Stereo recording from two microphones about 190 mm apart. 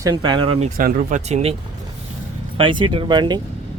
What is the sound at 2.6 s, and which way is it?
Speech, 25° right (ahead or behind).